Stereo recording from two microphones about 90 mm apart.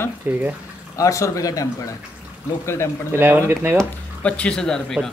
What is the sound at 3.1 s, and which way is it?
Speech, 25° right (ahead or behind).